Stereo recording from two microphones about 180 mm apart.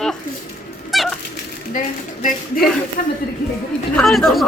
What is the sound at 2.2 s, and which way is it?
Speech, 50° left (ahead or behind).